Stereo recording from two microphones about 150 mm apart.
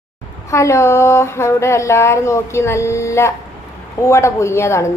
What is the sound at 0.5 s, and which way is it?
Speech, 20° left (ahead or behind).